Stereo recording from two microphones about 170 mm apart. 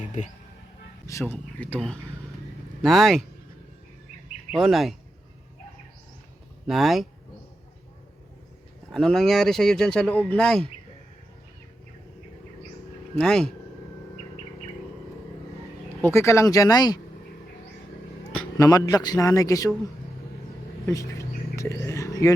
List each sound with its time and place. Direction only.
1.0 s speech: 15° left (ahead or behind)
4.5 s speech: centre (ahead or behind)
6.7 s speech: centre (ahead or behind)
8.9 s speech: 5° left (ahead or behind)
13.1 s speech: 5° left (ahead or behind)
16.0 s a man's voice: 15° left (ahead or behind)
18.5 s a man's voice: 20° left (ahead or behind)
20.8 s a sound: 20° left (ahead or behind)